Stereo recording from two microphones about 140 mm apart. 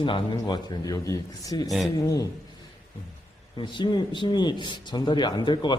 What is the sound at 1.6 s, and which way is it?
Speech, centre (ahead or behind).